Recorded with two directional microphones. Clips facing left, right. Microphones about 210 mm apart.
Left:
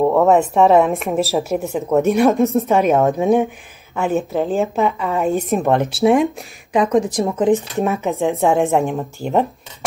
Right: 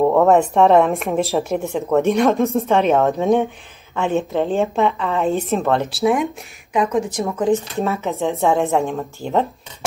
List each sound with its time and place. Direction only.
0.0 s speech: centre (ahead or behind)
6.7 s speech: 35° left (ahead or behind)
7.3 s speech: 20° left (ahead or behind)